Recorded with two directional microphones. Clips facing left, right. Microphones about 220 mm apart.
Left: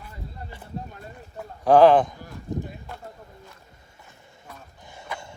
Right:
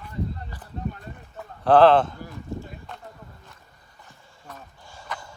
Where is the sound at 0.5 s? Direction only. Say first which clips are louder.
Even; 25° left (ahead or behind).